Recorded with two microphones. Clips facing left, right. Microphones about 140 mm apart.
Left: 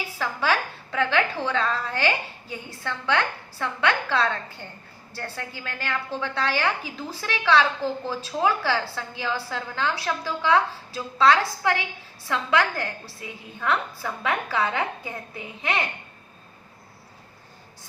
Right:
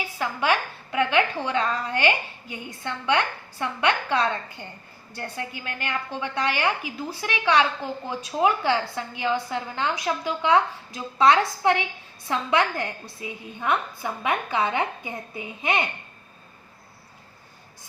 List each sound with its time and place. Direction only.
0.2 s a woman's voice: 15° right (ahead or behind)